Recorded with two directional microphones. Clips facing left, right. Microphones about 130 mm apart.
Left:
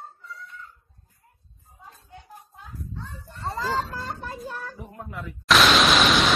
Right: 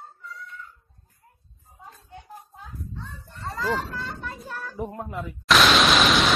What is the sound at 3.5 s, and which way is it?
Fowl, 30° left (ahead or behind).